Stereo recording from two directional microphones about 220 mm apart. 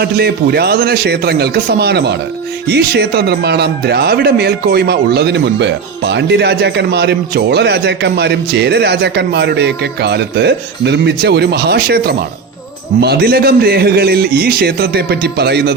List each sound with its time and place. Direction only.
0.0 s speech: 45° right (ahead or behind)